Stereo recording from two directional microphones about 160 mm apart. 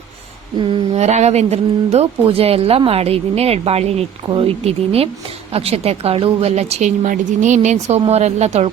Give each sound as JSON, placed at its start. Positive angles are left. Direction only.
{"t": 0.9, "sound": "a woman's voice", "side_deg": -45}